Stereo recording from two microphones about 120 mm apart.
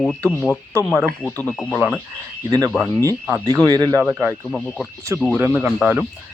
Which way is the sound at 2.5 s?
30° right (ahead or behind).